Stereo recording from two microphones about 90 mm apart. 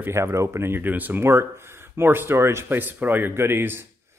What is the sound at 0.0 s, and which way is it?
Speech, 30° right (ahead or behind).